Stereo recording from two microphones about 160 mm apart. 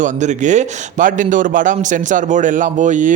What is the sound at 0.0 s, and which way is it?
A man's voice, 50° right (ahead or behind).